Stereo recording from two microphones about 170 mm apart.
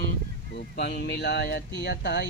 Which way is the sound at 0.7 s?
75° left (ahead or behind).